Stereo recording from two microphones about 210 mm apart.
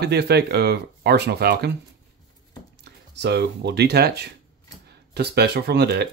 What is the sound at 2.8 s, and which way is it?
Speech, 55° right (ahead or behind).